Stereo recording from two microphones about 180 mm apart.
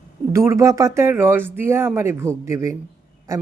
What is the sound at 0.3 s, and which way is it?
Speech, 15° right (ahead or behind).